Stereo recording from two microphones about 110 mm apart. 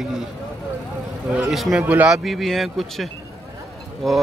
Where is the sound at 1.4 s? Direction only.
Centre (ahead or behind).